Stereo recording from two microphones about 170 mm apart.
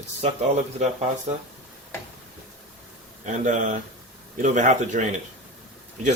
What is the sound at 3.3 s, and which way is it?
Speech, 50° right (ahead or behind).